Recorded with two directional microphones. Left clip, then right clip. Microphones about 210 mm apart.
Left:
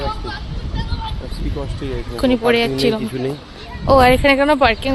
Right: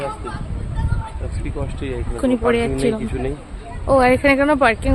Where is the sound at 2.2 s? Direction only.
Centre (ahead or behind).